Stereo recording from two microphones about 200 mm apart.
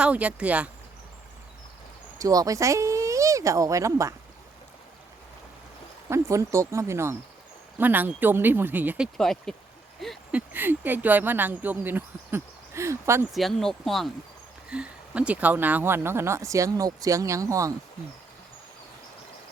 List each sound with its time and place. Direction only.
0.0 s speech: 5° right (ahead or behind)
2.1 s speech: 15° right (ahead or behind)
6.1 s speech: 15° right (ahead or behind)
9.1 s speech: centre (ahead or behind)
10.0 s a sound: centre (ahead or behind)
10.5 s speech: 10° right (ahead or behind)
13.3 s speech: centre (ahead or behind); by 17.7 s 15° right (ahead or behind)